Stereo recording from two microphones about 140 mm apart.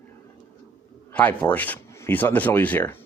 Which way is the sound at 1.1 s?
10° left (ahead or behind).